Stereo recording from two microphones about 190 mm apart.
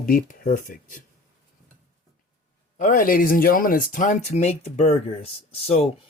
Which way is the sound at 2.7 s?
45° left (ahead or behind).